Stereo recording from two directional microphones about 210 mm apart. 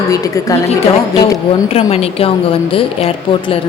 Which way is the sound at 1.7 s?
30° left (ahead or behind).